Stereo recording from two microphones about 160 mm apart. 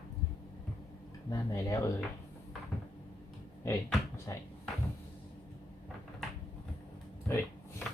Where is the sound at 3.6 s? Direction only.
20° left (ahead or behind).